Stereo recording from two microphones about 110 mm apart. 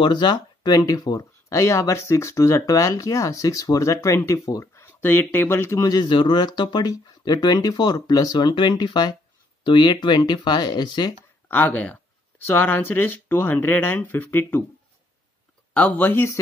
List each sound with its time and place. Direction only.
0.0 s speech: 45° left (ahead or behind); by 5.9 s 25° left (ahead or behind)
5.9 s speech: 45° left (ahead or behind)
11.4 s speech: 15° left (ahead or behind)
15.7 s speech: 15° left (ahead or behind)